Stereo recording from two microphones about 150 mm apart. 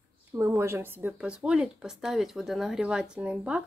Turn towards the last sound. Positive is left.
turn(degrees=-5)  # may be behind; listen again after turning